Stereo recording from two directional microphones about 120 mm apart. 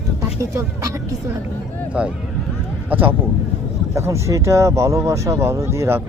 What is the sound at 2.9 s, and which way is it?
A man's voice, 15° right (ahead or behind).